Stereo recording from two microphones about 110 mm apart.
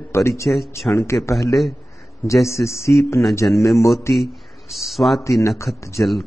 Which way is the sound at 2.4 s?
Centre (ahead or behind).